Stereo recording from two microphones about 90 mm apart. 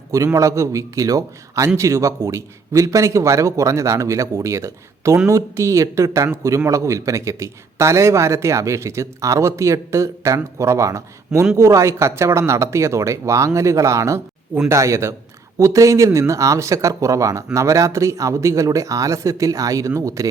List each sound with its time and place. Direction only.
0.3 s a man's voice: 35° right (ahead or behind)